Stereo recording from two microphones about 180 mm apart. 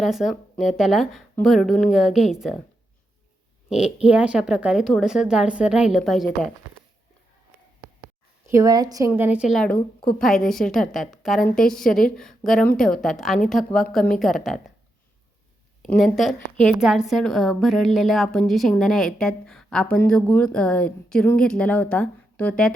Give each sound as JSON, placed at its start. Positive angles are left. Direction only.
{"t": 0.0, "sound": "speech", "side_deg": 0}
{"t": 3.7, "sound": "speech", "side_deg": -5}
{"t": 8.4, "sound": "speech", "side_deg": -15}
{"t": 15.8, "sound": "speech", "side_deg": 0}